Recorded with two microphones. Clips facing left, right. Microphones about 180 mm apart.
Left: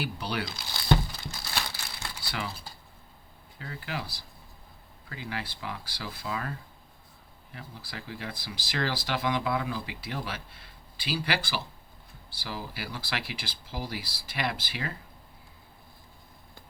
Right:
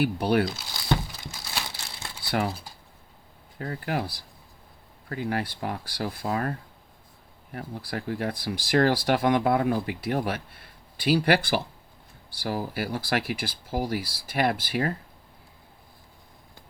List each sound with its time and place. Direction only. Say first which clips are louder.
0.0 s speech: right 10 dB; 55° right (ahead or behind)
0.5 s crumpling: left 1 dB; 5° right (ahead or behind)
1.7 s crumpling: right 1 dB; 25° right (ahead or behind)
3.6 s speech: right 8 dB; 50° right (ahead or behind)
12.4 s speech: right 9 dB; 50° right (ahead or behind)